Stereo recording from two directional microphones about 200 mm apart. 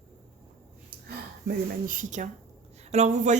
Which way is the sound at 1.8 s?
40° right (ahead or behind).